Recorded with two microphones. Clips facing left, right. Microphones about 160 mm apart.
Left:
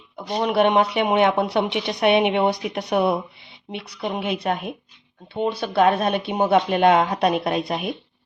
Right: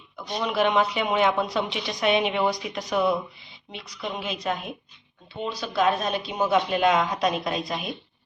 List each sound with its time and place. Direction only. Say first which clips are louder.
0.4 s speech: left 4 dB; 60° left (ahead or behind)